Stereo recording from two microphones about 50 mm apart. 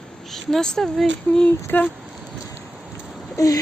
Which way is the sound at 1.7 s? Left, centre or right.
Left.